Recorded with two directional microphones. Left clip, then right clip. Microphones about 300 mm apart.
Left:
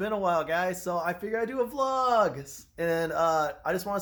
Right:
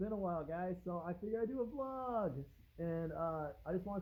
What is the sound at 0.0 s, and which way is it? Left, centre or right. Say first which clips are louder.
Speech: left 14 dB; centre.